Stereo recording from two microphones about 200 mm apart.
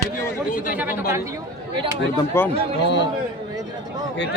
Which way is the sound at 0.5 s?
40° left (ahead or behind).